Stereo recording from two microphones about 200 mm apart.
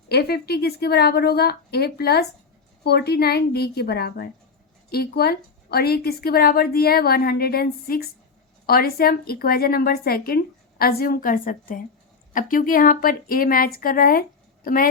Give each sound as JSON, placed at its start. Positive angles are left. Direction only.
{"t": 0.1, "sound": "a woman's voice", "side_deg": 50}